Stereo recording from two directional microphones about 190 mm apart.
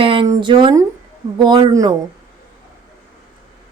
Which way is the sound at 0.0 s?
30° right (ahead or behind).